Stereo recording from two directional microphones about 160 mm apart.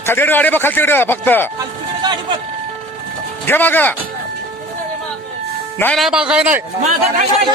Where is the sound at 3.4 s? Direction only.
10° left (ahead or behind).